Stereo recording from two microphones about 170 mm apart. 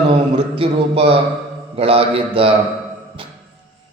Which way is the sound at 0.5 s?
35° right (ahead or behind).